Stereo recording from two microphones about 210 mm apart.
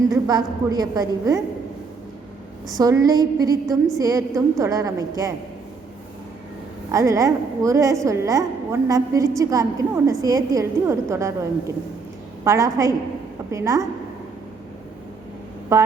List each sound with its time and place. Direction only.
0.1 s a woman's voice: 20° right (ahead or behind)
2.7 s a woman's voice: 15° right (ahead or behind)
6.9 s a woman's voice: 15° right (ahead or behind)
12.5 s a woman's voice: 15° right (ahead or behind)
15.7 s a woman's voice: 15° right (ahead or behind)